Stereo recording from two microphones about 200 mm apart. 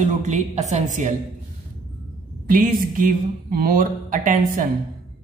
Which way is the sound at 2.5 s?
45° right (ahead or behind).